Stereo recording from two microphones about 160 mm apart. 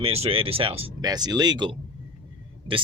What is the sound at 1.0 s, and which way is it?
Speech, 25° right (ahead or behind).